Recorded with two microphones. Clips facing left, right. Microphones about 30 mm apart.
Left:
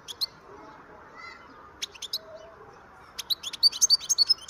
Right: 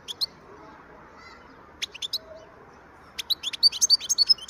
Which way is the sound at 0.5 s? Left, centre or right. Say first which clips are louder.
Even; centre.